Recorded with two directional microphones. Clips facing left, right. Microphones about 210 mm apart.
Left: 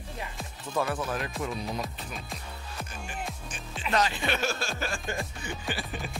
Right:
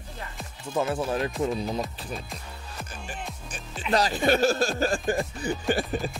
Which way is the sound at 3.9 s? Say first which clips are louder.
Right 5 dB; 40° right (ahead or behind).